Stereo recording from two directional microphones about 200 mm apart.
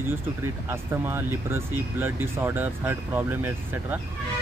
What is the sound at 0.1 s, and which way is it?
Speech, 10° right (ahead or behind).